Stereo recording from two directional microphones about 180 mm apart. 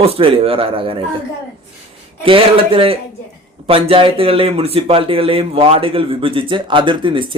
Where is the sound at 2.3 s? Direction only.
30° right (ahead or behind).